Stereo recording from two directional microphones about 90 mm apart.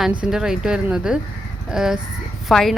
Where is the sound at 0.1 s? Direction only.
10° right (ahead or behind).